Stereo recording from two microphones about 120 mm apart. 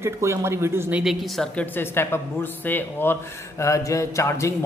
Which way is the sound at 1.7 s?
20° left (ahead or behind).